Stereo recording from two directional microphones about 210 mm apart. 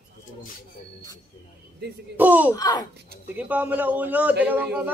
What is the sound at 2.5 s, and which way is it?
Speech, 20° left (ahead or behind).